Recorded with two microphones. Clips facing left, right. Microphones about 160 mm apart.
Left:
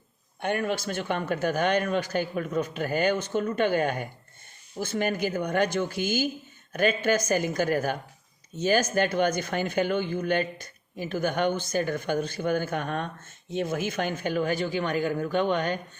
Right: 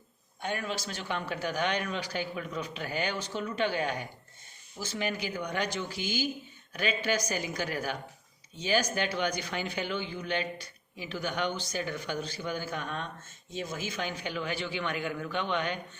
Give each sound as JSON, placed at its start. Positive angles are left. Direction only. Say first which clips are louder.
{"t": 0.4, "sound": "speech", "louder": "left 7 dB", "side_deg": 55}